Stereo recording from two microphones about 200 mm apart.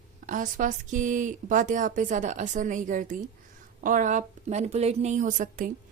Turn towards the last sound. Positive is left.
turn(degrees=-40)  # may be behind; listen again after turning